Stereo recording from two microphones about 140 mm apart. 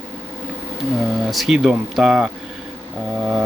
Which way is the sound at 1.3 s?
5° right (ahead or behind).